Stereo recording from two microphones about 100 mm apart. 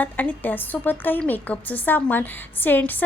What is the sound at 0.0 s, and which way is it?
A woman's voice, 15° left (ahead or behind).